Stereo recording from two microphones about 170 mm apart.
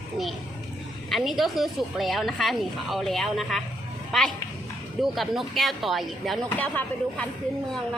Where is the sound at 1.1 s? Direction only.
Centre (ahead or behind).